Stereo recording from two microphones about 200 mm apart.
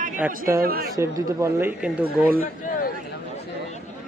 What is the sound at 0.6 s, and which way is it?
Speech, 45° right (ahead or behind).